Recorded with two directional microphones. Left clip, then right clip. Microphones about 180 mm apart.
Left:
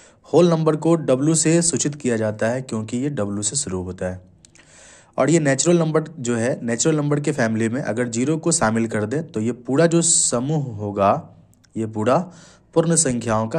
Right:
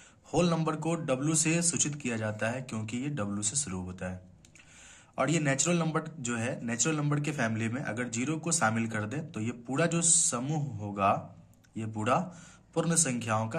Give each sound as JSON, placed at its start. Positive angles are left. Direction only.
{"t": 0.3, "sound": "speech", "side_deg": 35}